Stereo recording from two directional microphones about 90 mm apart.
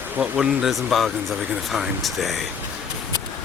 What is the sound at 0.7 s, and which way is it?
Speech, centre (ahead or behind).